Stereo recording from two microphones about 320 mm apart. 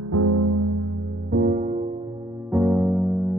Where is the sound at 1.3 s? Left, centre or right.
Right.